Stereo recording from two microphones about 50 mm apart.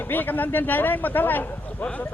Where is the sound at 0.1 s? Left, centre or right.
Left.